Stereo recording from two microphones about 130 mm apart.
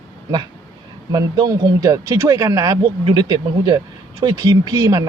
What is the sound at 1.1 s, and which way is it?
Speech, 35° right (ahead or behind).